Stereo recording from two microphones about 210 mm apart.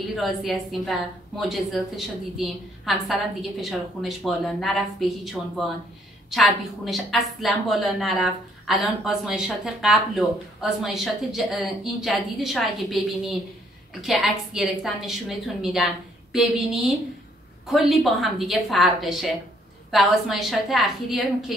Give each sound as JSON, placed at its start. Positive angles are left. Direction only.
{"t": 0.1, "sound": "a woman's voice", "side_deg": 0}